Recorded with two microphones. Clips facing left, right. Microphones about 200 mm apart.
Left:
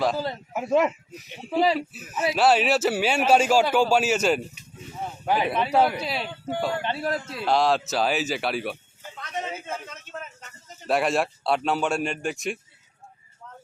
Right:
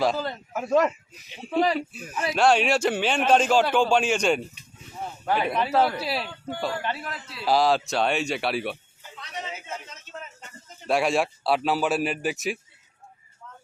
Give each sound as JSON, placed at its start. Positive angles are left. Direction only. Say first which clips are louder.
{"t": 0.0, "sound": "a man's voice", "louder": "even", "side_deg": 5}
{"t": 5.2, "sound": "speech", "louder": "left 1 dB", "side_deg": 15}
{"t": 5.5, "sound": "speech", "louder": "even", "side_deg": 0}
{"t": 5.7, "sound": "a man's voice", "louder": "left 2 dB", "side_deg": 15}
{"t": 6.0, "sound": "speech", "louder": "right 1 dB", "side_deg": 0}
{"t": 6.7, "sound": "speech", "louder": "left 1 dB", "side_deg": 25}
{"t": 7.1, "sound": "a man's voice", "louder": "left 9 dB", "side_deg": 45}
{"t": 7.4, "sound": "speech", "louder": "right 1 dB", "side_deg": 0}
{"t": 9.3, "sound": "a man's voice", "louder": "left 4 dB", "side_deg": 50}
{"t": 10.8, "sound": "speech", "louder": "even", "side_deg": 0}